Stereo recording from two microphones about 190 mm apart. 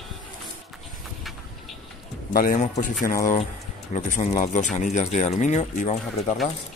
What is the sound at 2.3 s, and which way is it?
Speech, 45° left (ahead or behind).